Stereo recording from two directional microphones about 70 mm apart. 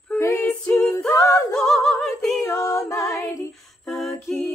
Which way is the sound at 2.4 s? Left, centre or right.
Left.